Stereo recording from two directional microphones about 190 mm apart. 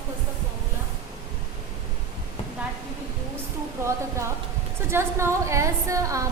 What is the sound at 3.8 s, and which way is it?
A woman's voice, 15° right (ahead or behind).